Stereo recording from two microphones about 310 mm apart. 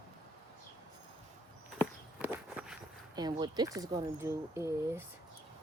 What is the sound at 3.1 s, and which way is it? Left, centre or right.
Speech, centre.